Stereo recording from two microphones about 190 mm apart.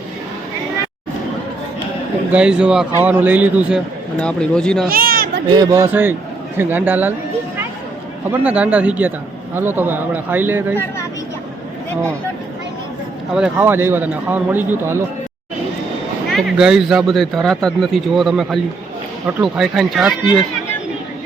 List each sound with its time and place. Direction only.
2.3 s a man's voice: 5° right (ahead or behind)
4.2 s speech: 5° left (ahead or behind)
4.9 s a sound: 50° right (ahead or behind)
5.5 s a man's voice: 20° right (ahead or behind)
8.3 s a man's voice: 5° right (ahead or behind)
13.3 s a man's voice: 5° right (ahead or behind)
16.3 s speech: 5° right (ahead or behind)